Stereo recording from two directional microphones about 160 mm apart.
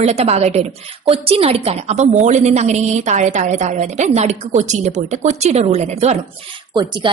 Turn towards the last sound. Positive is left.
turn(degrees=-30)  # may be behind; listen again after turning